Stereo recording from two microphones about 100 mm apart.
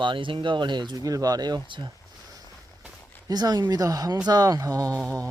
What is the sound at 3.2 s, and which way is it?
Speech, 40° right (ahead or behind).